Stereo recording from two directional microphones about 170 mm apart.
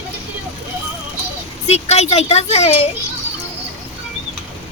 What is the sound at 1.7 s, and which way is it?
Speech, 40° left (ahead or behind).